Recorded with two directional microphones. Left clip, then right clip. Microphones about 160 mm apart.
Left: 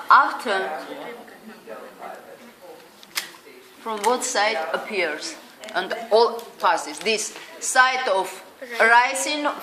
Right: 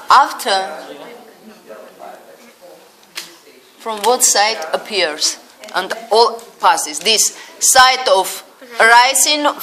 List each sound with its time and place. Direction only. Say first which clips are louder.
0.1 s speech: right 5 dB; 65° right (ahead or behind)
3.2 s a sound: even; 60° left (ahead or behind)
3.8 s speech: right 8 dB; 60° right (ahead or behind)
5.7 s a woman's voice: right 5 dB; 40° right (ahead or behind)